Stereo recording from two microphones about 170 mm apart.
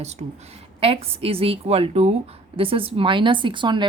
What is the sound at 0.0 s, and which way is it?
A woman's voice, 40° right (ahead or behind).